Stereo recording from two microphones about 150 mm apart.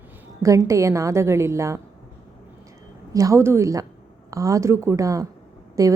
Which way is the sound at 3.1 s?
25° right (ahead or behind).